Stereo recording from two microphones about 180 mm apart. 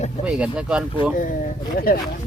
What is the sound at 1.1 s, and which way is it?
Speech, 50° left (ahead or behind).